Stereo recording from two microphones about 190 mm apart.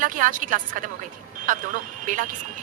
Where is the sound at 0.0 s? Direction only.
45° right (ahead or behind).